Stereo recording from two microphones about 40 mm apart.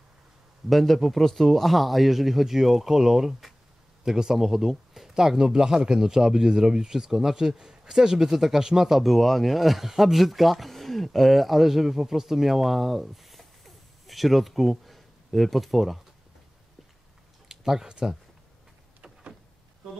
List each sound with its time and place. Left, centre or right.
0.7 s speech: centre
17.5 s a sound: centre
17.8 s speech: right